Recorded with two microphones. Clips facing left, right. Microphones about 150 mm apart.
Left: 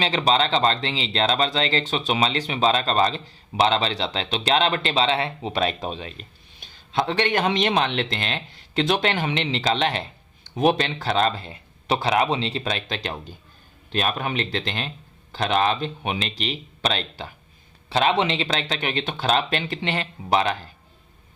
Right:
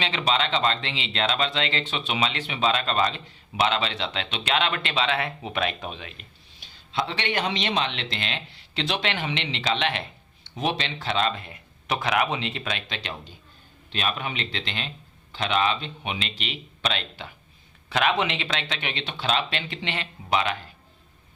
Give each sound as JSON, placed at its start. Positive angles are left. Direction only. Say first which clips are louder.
{"t": 0.0, "sound": "speech", "louder": "left 4 dB", "side_deg": 40}
{"t": 6.6, "sound": "a man's voice", "louder": "left 4 dB", "side_deg": 50}
{"t": 10.5, "sound": "speech", "louder": "left 7 dB", "side_deg": 50}